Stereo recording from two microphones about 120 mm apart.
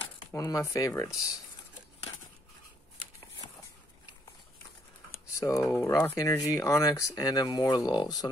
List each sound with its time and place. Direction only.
0.3 s speech: 25° left (ahead or behind)
5.4 s speech: 25° left (ahead or behind)